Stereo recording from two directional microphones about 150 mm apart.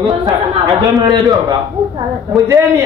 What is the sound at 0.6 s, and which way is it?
A man's voice, 25° right (ahead or behind).